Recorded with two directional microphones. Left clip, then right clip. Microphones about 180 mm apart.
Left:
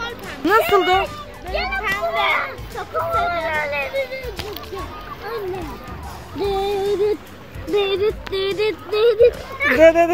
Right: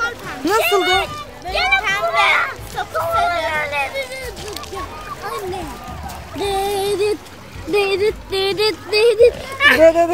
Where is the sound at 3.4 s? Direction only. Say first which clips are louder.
Right 2 dB; 5° right (ahead or behind).